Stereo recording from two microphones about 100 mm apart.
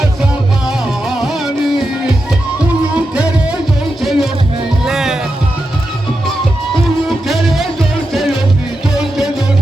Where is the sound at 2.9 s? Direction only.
10° right (ahead or behind).